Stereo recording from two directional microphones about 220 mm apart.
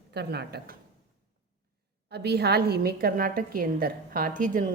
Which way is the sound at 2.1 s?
50° right (ahead or behind).